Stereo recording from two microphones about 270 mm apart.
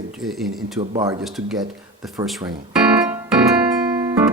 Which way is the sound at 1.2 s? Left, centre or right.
Centre.